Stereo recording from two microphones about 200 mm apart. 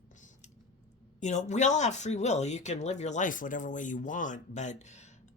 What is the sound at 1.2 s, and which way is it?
Speech, 35° left (ahead or behind).